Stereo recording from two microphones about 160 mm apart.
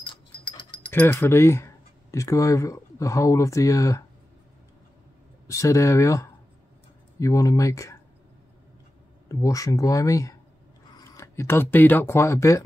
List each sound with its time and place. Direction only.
0.0 s dog: 30° left (ahead or behind)
0.9 s speech: 15° left (ahead or behind)
5.5 s speech: 20° left (ahead or behind)
9.3 s speech: 20° left (ahead or behind)